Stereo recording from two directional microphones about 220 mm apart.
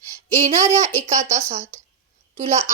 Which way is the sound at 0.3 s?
30° right (ahead or behind).